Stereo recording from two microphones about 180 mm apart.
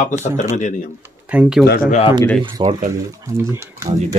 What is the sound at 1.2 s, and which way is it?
Speech, 5° right (ahead or behind).